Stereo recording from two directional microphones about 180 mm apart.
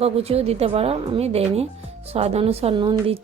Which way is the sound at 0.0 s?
35° right (ahead or behind).